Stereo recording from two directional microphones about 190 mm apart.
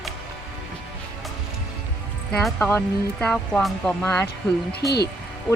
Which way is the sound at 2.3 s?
5° left (ahead or behind).